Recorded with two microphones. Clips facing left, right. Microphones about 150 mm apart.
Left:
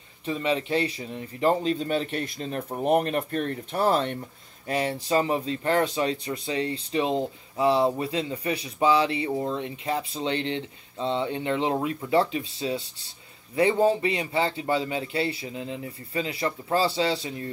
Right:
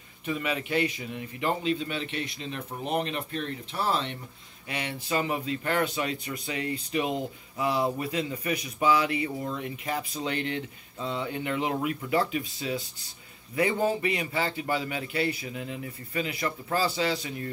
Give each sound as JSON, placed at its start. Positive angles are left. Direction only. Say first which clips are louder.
{"t": 0.2, "sound": "speech", "louder": "left 4 dB", "side_deg": 30}
{"t": 4.6, "sound": "speech", "louder": "left 7 dB", "side_deg": 40}